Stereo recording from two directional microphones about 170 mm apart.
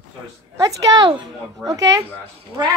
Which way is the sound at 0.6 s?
20° right (ahead or behind).